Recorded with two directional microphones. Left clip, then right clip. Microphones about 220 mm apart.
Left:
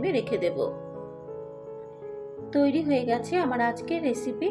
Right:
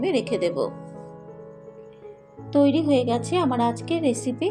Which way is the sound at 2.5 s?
25° right (ahead or behind).